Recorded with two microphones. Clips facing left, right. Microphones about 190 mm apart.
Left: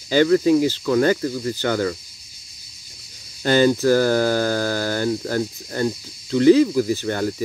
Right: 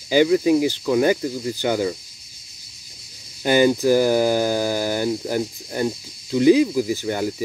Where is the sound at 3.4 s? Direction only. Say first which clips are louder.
Even; 15° right (ahead or behind).